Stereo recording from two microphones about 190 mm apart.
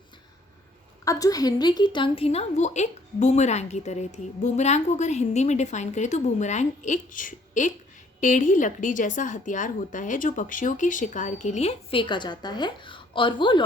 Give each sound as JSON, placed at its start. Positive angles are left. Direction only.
{"t": 1.0, "sound": "a woman's voice", "side_deg": 20}